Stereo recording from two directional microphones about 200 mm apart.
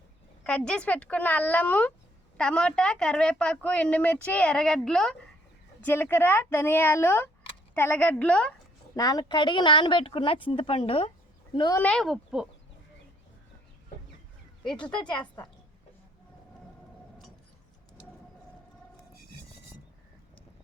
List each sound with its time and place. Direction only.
0.4 s a woman's voice: 5° left (ahead or behind)
9.0 s speech: 20° left (ahead or behind)
11.8 s a woman's voice: 5° left (ahead or behind)
14.8 s speech: 25° left (ahead or behind)